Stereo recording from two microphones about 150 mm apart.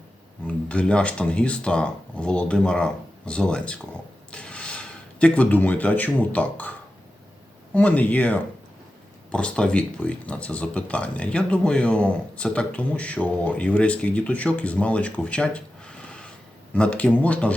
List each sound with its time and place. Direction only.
0.4 s speech: 5° left (ahead or behind)